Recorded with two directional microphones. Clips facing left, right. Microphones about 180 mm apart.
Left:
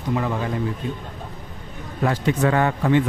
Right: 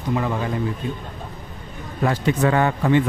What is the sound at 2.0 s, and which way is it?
Speech, 30° right (ahead or behind).